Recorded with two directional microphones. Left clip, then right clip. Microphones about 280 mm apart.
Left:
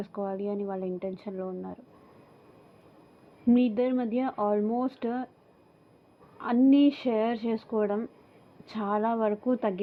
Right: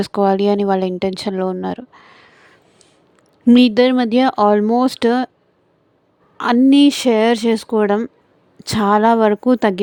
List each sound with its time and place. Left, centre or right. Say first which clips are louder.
0.0 s speech: right 18 dB; right
3.4 s speech: right 14 dB; right
6.3 s speech: right 11 dB; right